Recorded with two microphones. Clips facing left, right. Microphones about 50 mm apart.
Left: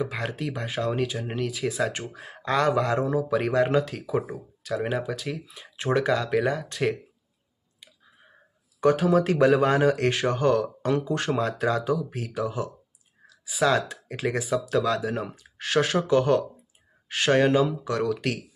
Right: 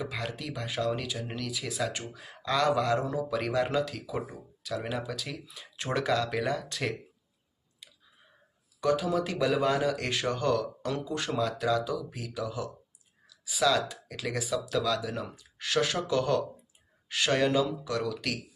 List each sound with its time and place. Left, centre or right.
0.0 s speech: left
8.8 s speech: left